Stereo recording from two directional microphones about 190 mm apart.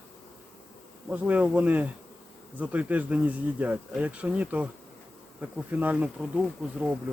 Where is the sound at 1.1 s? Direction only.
5° right (ahead or behind).